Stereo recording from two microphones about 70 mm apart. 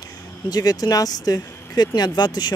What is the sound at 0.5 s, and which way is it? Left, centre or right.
Speech, left.